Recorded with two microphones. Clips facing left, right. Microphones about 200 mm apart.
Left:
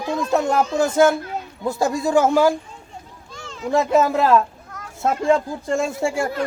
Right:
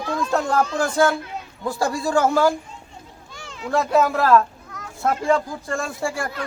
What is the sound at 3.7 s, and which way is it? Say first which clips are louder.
A man's voice: left 2 dB; 20° left (ahead or behind).